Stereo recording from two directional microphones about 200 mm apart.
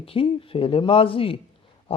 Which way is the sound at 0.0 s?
25° left (ahead or behind).